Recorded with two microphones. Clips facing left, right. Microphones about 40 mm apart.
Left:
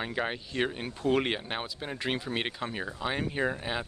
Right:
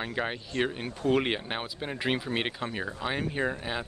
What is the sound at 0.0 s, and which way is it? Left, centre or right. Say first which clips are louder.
Speech: even; centre.